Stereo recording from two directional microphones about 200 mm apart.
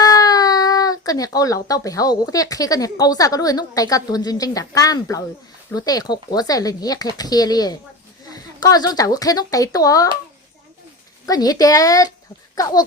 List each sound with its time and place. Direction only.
0.0 s a woman's voice: 20° left (ahead or behind)
11.3 s a woman's voice: 20° left (ahead or behind)